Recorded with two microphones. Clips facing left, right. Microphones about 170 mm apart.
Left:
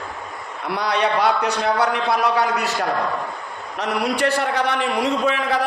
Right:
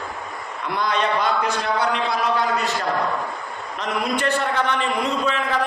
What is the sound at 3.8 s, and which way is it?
A man's voice, 80° left.